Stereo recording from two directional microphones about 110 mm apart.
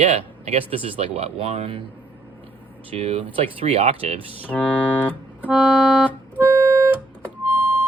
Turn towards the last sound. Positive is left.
turn(degrees=-15)  # may be behind; listen again after turning